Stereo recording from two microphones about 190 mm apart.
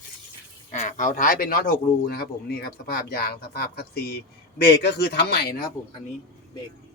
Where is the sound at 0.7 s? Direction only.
40° left (ahead or behind).